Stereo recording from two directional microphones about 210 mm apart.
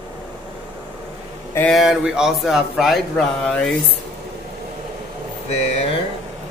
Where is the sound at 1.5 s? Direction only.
5° left (ahead or behind).